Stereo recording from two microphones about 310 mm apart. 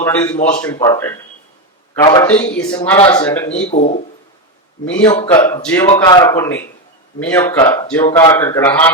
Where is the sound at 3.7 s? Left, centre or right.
Left.